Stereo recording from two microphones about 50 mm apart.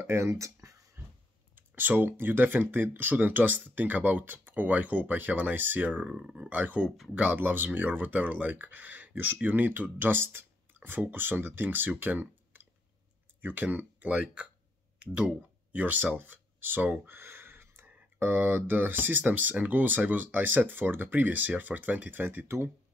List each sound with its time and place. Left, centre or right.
0.0 s a sound: right
1.5 s speech: right
6.0 s speech: centre
6.3 s speech: right
15.1 s a sound: right
18.2 s speech: right